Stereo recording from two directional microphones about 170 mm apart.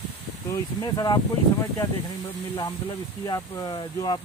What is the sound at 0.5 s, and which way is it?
Speech, 20° left (ahead or behind).